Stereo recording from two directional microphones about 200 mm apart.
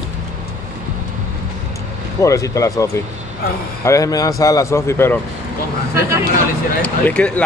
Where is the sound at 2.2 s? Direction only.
15° left (ahead or behind).